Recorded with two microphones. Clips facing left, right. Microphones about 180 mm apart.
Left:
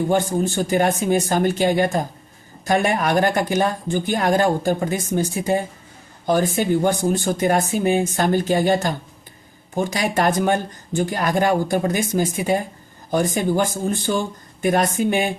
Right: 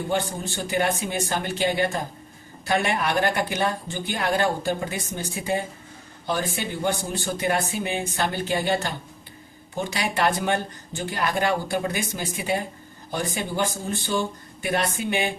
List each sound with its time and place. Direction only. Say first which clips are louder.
0.1 s speech: left 7 dB; 45° left (ahead or behind)
14.1 s speech: left 3 dB; 55° left (ahead or behind)
14.6 s speech: left 7 dB; 45° left (ahead or behind)